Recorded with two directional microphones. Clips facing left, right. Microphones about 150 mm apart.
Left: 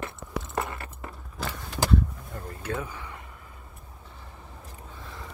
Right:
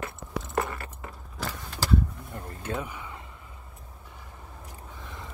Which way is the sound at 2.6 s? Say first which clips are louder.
Even; 20° right (ahead or behind).